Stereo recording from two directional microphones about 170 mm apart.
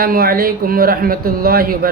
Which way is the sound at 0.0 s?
60° right (ahead or behind).